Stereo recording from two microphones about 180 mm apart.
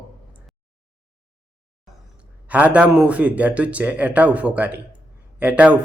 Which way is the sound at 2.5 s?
5° right (ahead or behind).